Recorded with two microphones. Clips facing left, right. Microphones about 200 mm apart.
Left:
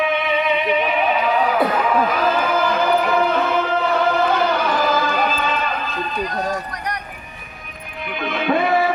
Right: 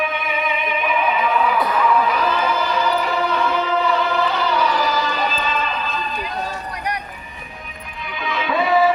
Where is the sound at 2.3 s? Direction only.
55° left (ahead or behind).